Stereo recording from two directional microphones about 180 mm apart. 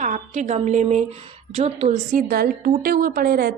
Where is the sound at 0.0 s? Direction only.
45° right (ahead or behind).